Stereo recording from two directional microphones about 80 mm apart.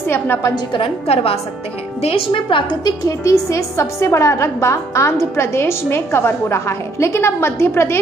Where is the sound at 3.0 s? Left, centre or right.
Left.